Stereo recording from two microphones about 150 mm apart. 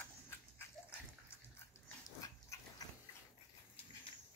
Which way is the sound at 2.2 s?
25° left (ahead or behind).